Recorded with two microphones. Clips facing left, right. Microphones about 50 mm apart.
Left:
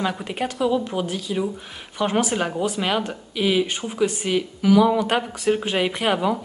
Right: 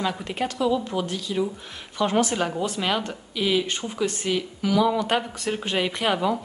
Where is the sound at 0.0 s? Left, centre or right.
Centre.